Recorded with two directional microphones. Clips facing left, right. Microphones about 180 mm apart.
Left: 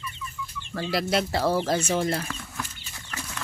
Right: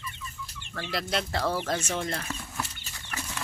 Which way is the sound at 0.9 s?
5° left (ahead or behind).